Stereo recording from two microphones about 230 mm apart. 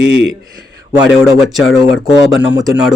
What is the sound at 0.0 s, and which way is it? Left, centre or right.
Speech, right.